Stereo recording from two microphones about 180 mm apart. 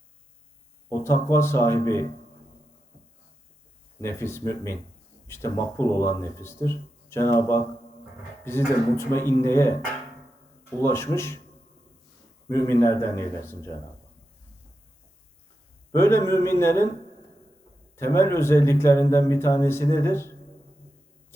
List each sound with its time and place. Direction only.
0.9 s speech: 15° left (ahead or behind)
4.0 s speech: 15° left (ahead or behind)
10.8 s speech: 15° left (ahead or behind)
12.5 s speech: 15° left (ahead or behind)
16.0 s speech: 15° left (ahead or behind)
17.9 s speech: 15° left (ahead or behind)